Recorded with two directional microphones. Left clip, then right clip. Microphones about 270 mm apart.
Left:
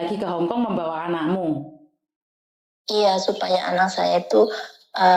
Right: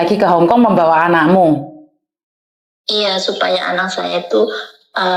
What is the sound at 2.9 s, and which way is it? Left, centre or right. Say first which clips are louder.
Speech: right 3 dB; left.